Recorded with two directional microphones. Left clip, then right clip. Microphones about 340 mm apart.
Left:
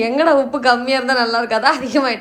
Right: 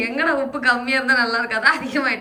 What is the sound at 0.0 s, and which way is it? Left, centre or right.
A woman's voice, centre.